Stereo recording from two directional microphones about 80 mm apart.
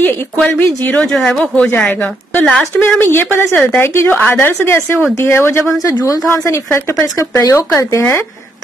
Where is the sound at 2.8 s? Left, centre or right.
Left.